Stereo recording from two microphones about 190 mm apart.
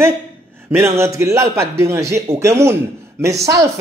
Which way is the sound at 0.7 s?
15° right (ahead or behind).